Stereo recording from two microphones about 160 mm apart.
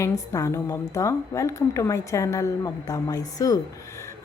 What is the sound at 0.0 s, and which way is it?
A woman's voice, 20° left (ahead or behind).